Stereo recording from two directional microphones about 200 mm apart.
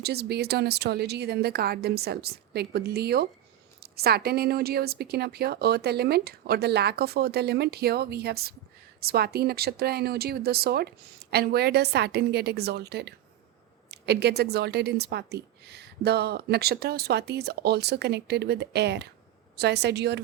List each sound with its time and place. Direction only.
0.0 s a woman's voice: 55° right (ahead or behind)